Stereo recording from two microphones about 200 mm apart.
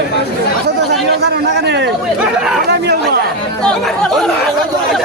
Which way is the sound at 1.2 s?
55° right (ahead or behind).